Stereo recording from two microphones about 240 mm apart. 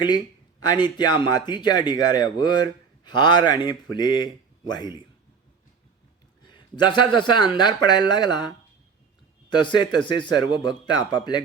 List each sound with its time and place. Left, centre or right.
0.7 s speech: centre
6.4 s speech: centre